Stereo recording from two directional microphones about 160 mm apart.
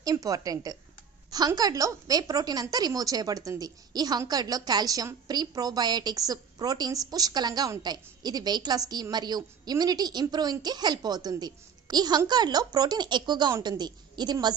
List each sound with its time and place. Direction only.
0.0 s a woman's voice: 20° right (ahead or behind)